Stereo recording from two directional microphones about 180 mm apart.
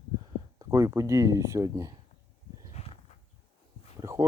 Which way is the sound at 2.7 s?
35° left (ahead or behind).